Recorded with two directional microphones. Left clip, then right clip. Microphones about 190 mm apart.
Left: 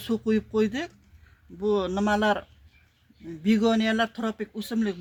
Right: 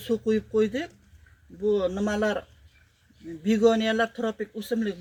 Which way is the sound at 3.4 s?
50° left (ahead or behind).